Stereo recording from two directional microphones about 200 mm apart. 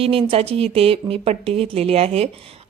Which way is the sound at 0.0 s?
30° right (ahead or behind).